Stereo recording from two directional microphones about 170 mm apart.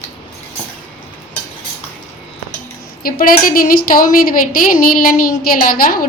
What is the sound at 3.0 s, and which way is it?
A woman's voice, 60° left (ahead or behind).